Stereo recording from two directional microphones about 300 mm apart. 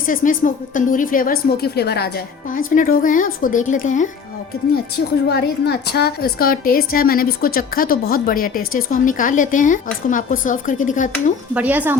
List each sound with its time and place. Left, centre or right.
0.1 s a woman's voice: left
5.3 s a woman's voice: left
11.5 s speech: centre